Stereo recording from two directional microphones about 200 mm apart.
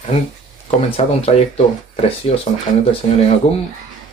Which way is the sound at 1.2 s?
30° left (ahead or behind).